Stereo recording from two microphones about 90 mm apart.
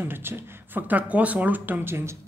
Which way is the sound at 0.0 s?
25° right (ahead or behind).